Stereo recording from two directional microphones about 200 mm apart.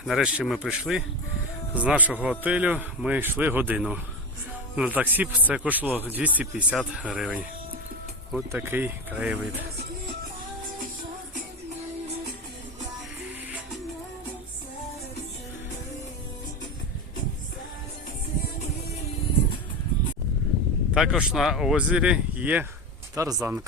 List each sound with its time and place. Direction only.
0.0 s speech: centre (ahead or behind)
20.9 s speech: centre (ahead or behind)